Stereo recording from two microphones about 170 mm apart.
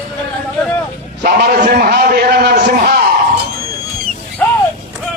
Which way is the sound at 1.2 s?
55° right (ahead or behind).